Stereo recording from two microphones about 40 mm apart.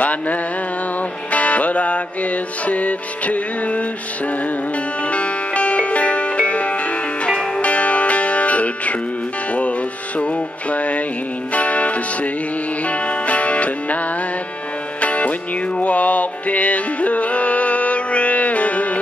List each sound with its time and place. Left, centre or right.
0.0 s a sound: left
1.3 s music: left
5.0 s music: left
7.2 s music: left
7.6 s music: left